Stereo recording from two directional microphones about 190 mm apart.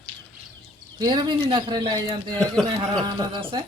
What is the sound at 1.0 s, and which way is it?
Speech, 20° right (ahead or behind).